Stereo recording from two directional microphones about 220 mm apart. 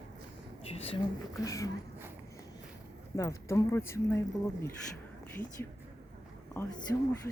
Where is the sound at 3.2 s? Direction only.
15° left (ahead or behind).